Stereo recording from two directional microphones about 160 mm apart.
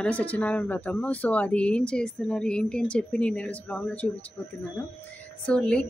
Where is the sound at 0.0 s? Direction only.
10° left (ahead or behind).